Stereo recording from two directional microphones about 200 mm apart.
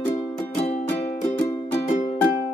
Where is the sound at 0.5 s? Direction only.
30° left (ahead or behind).